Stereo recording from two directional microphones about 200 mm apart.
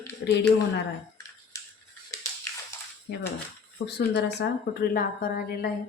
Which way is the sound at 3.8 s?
55° left (ahead or behind).